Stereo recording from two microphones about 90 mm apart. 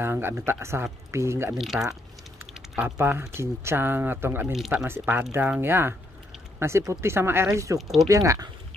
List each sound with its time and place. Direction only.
0.0 s speech: 25° right (ahead or behind)
1.6 s speech: centre (ahead or behind)
2.8 s speech: 25° right (ahead or behind)
4.5 s speech: 5° right (ahead or behind)
4.8 s speech: 25° right (ahead or behind)